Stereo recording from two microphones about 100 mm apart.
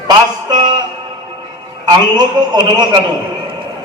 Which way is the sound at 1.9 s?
45° right (ahead or behind).